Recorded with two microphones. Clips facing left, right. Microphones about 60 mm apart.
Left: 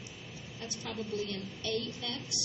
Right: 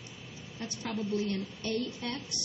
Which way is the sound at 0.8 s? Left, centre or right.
Right.